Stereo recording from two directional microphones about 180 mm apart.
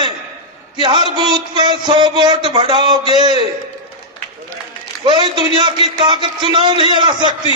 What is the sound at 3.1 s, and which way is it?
Speech, 35° left (ahead or behind).